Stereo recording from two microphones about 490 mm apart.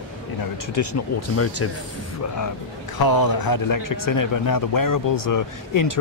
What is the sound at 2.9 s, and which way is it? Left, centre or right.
Speech, left.